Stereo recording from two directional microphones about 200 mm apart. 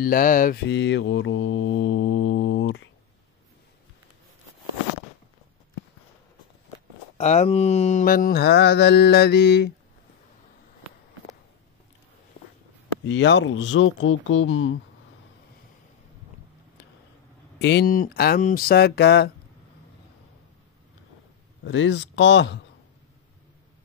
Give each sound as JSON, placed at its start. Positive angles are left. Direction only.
{"t": 0.0, "sound": "mantra", "side_deg": 45}
{"t": 0.7, "sound": "mantra", "side_deg": 60}
{"t": 7.2, "sound": "mantra", "side_deg": 35}
{"t": 13.0, "sound": "speech", "side_deg": 65}
{"t": 17.6, "sound": "mantra", "side_deg": 55}
{"t": 21.6, "sound": "speech", "side_deg": 70}